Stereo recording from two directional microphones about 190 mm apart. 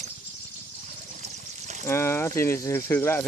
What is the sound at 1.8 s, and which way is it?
Speech, 15° left (ahead or behind).